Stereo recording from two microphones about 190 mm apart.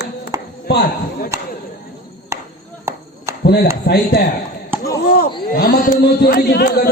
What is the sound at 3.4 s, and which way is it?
Speech, 60° left (ahead or behind).